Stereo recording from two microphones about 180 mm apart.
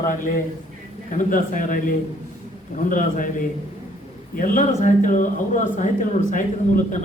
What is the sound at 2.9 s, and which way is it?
A man's voice, 45° left (ahead or behind).